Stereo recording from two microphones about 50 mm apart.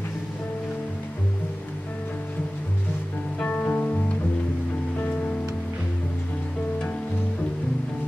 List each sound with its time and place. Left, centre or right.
3.4 s music: left